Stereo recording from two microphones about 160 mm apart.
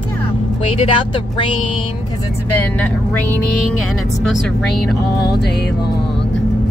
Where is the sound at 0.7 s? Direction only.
30° left (ahead or behind).